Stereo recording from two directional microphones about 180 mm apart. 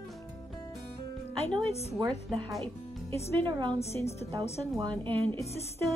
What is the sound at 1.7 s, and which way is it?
Speech, 35° left (ahead or behind).